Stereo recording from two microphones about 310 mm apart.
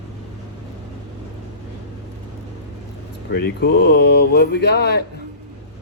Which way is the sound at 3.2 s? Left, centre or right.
Left.